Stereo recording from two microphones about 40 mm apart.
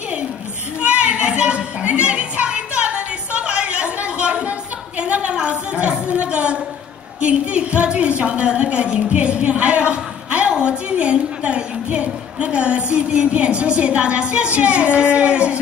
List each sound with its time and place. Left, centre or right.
0.7 s children playing: right
1.8 s music: right
5.3 s a sound: right
7.2 s a woman's voice: right
9.1 s a sound: right
10.6 s a woman's voice: right